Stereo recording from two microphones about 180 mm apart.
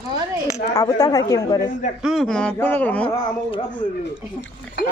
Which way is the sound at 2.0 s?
Centre (ahead or behind).